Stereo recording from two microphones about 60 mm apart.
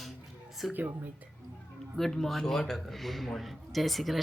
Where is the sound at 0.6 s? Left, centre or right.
Centre.